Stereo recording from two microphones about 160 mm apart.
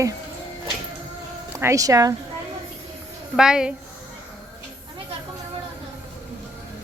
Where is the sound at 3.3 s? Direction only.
5° right (ahead or behind).